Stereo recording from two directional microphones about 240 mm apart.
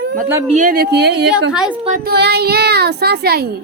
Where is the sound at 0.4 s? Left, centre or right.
Right.